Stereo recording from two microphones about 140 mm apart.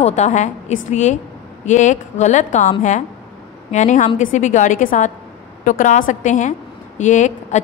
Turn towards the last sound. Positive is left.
turn(degrees=60)  # may be behind; listen again after turning